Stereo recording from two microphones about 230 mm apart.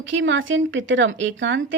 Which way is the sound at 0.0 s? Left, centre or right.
Right.